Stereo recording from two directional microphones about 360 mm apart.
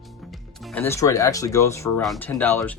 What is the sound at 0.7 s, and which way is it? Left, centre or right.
Speech, centre.